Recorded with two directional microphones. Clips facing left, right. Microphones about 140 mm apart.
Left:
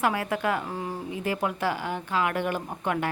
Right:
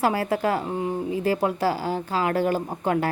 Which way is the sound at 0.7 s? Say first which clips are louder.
Right 7 dB; 25° right (ahead or behind).